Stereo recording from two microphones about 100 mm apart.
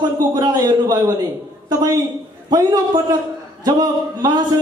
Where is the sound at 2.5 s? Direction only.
45° right (ahead or behind).